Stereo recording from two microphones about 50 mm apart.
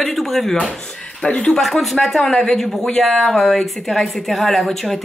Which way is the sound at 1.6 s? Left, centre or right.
Centre.